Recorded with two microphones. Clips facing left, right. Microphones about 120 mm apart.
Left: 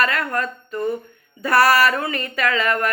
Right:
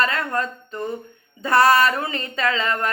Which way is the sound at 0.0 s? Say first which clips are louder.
Left 1 dB; 25° right (ahead or behind).